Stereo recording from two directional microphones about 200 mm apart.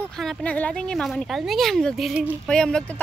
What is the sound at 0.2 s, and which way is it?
Speech, 5° left (ahead or behind).